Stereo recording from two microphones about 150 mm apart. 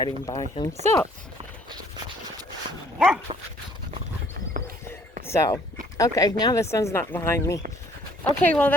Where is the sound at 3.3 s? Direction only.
40° right (ahead or behind).